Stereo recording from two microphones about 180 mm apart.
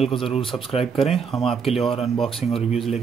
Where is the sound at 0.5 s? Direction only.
25° left (ahead or behind).